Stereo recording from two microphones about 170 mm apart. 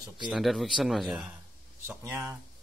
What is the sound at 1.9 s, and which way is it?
Speech, 15° right (ahead or behind).